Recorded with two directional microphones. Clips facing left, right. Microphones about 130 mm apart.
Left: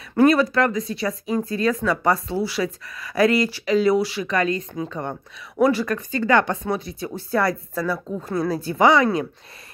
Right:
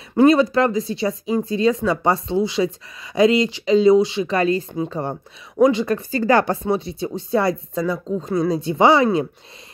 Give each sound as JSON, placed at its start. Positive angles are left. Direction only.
{"t": 0.1, "sound": "speech", "side_deg": -25}